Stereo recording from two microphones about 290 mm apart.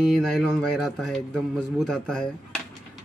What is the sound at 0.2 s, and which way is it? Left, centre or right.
A man's voice, centre.